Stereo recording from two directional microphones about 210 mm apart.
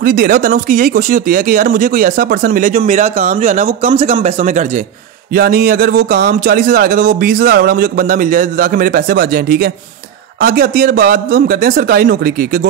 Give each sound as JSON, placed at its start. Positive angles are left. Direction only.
{"t": 0.0, "sound": "a man's voice", "side_deg": -40}